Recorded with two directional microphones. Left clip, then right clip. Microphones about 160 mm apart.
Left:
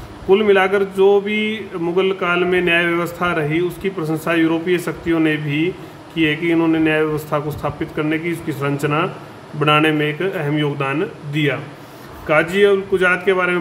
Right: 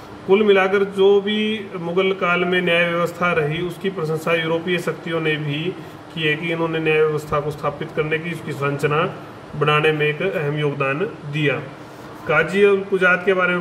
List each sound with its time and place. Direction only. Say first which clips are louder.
0.3 s a man's voice: left 1 dB; 40° left (ahead or behind)